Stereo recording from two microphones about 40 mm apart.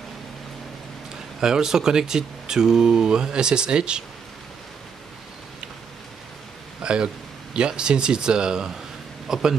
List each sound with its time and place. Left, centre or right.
1.4 s speech: centre
6.8 s a sound: right
7.5 s speech: right